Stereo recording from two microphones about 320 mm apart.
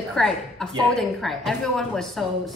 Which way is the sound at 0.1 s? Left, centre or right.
Centre.